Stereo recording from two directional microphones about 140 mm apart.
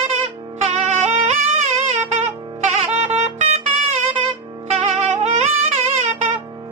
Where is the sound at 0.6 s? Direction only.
55° right (ahead or behind).